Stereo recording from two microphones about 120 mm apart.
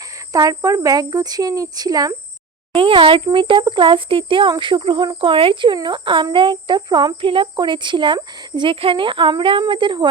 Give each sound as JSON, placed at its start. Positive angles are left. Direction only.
{"t": 0.3, "sound": "speech", "side_deg": -30}
{"t": 2.7, "sound": "speech", "side_deg": -45}